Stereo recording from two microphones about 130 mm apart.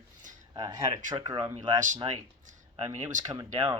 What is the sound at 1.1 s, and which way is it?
Speech, 35° right (ahead or behind).